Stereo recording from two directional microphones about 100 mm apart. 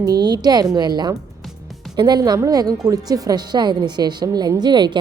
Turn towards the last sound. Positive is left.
turn(degrees=-45)  # may be behind; listen again after turning